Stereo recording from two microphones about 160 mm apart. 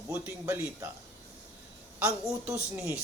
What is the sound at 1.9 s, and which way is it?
Speech, 10° right (ahead or behind).